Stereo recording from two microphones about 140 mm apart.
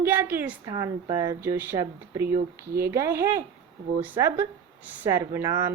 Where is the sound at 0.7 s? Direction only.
25° right (ahead or behind).